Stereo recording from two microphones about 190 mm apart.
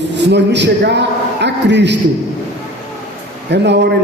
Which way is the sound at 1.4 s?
65° right (ahead or behind).